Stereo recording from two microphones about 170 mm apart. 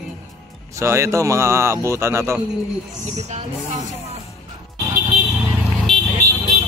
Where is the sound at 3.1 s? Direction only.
45° right (ahead or behind).